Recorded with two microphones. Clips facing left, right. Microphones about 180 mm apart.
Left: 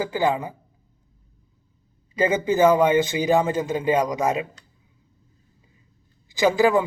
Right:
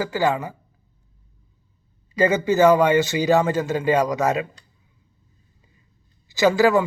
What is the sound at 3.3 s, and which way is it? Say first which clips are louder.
A man's voice: right 2 dB; 15° left (ahead or behind).